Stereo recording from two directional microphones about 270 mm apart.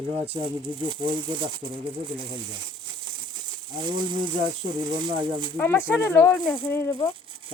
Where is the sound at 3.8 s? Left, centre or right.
Centre.